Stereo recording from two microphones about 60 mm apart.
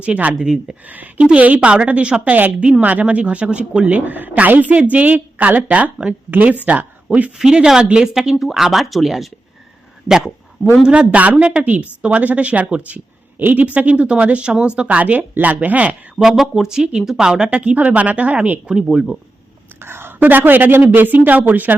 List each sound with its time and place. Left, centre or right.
0.0 s a woman's voice: right
0.3 s speech: centre
0.9 s a woman's voice: right; by 9.3 s centre
10.1 s a sound: centre
10.8 s a woman's voice: right
16.1 s a woman's voice: centre; by 18.6 s right
18.7 s speech: centre
19.8 s a woman's voice: right